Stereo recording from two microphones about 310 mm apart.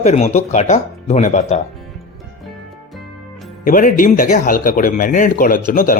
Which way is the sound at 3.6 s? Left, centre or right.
Left.